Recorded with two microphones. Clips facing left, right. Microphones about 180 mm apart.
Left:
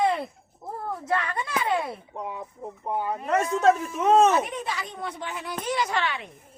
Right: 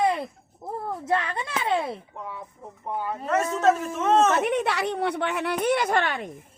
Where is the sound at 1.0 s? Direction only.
25° right (ahead or behind).